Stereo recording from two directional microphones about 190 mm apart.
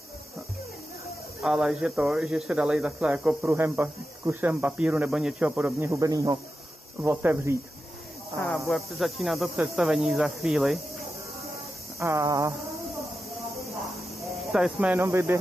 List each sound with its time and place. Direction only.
1.4 s speech: 5° right (ahead or behind)
8.5 s speech: centre (ahead or behind)
12.0 s speech: 15° right (ahead or behind)
14.5 s speech: 5° right (ahead or behind)